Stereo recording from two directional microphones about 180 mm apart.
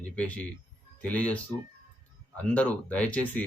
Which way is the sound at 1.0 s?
10° left (ahead or behind).